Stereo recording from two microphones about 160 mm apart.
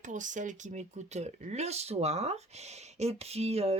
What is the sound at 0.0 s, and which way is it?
Speech, 50° right (ahead or behind).